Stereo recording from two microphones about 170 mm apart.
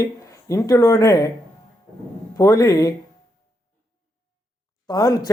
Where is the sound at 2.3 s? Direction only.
20° left (ahead or behind).